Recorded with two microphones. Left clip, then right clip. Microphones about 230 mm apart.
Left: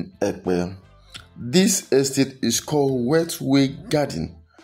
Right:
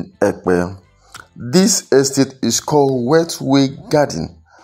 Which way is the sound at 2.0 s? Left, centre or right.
Centre.